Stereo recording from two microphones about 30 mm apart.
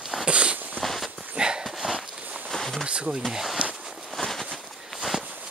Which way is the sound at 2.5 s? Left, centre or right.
Left.